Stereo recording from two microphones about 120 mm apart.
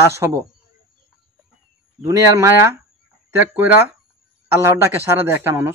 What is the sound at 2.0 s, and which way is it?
Speech, 20° right (ahead or behind).